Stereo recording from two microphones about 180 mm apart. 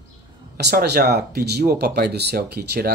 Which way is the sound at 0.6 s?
65° right (ahead or behind).